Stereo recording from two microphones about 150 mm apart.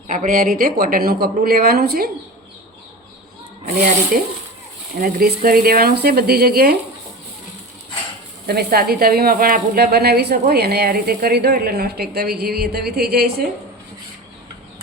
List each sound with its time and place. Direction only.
0.1 s speech: 65° right (ahead or behind); by 2.0 s 90° right
4.1 s speech: 70° right (ahead or behind)
4.9 s a woman's voice: 90° right
8.4 s a woman's voice: 90° right